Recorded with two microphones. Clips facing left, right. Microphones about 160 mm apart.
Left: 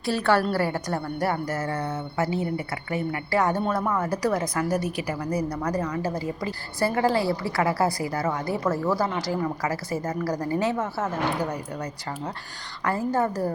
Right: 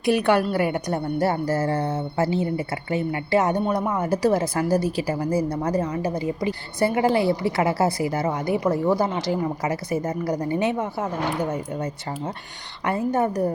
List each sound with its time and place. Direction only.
0.0 s a woman's voice: 15° right (ahead or behind)